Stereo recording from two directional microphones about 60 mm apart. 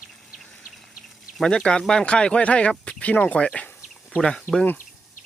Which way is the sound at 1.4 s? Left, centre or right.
Centre.